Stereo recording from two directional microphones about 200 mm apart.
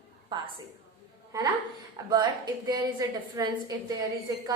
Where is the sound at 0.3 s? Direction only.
25° right (ahead or behind).